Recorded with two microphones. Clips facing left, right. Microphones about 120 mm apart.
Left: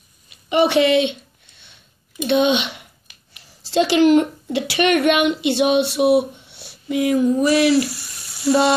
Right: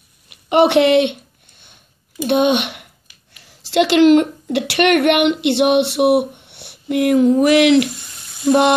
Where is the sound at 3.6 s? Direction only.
70° right (ahead or behind).